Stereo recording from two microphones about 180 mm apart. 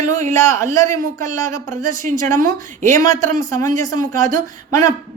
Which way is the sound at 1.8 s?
45° right (ahead or behind).